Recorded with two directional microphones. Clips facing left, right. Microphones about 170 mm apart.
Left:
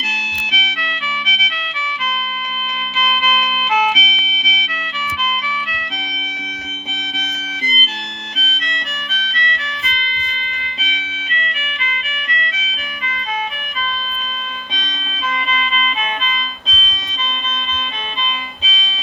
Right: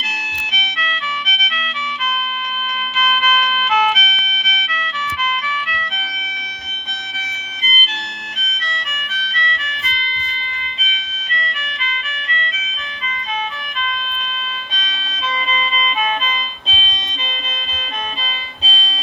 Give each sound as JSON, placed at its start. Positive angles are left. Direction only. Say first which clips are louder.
{"t": 0.0, "sound": "music", "louder": "left 2 dB", "side_deg": 10}
{"t": 3.0, "sound": "music", "louder": "even", "side_deg": 10}
{"t": 12.0, "sound": "music", "louder": "left 1 dB", "side_deg": -35}